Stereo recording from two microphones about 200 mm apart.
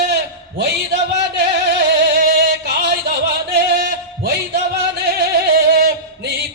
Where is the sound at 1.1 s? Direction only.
55° right (ahead or behind).